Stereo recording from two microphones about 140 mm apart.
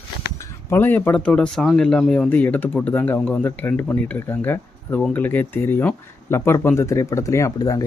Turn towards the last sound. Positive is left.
turn(degrees=25)  # may be behind; listen again after turning